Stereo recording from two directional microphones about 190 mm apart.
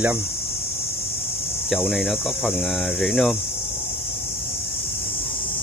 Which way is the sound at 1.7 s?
Centre (ahead or behind).